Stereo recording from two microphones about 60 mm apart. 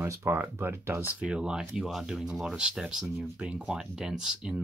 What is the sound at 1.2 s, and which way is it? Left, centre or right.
Speech, centre.